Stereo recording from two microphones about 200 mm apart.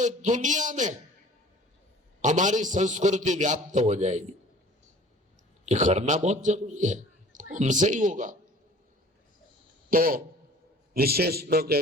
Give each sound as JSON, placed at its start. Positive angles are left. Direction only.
{"t": 0.0, "sound": "a man's voice", "side_deg": -40}
{"t": 2.2, "sound": "a man's voice", "side_deg": -40}
{"t": 5.6, "sound": "a man's voice", "side_deg": -35}
{"t": 9.9, "sound": "a man's voice", "side_deg": -45}